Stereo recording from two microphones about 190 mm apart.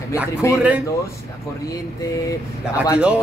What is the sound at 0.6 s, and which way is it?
Speech, 5° right (ahead or behind).